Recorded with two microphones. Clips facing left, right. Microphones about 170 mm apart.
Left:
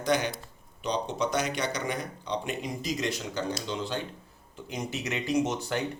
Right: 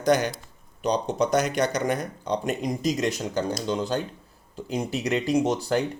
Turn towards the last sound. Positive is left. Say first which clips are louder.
# right 5 dB
turn(degrees=-35)  # may be behind; listen again after turning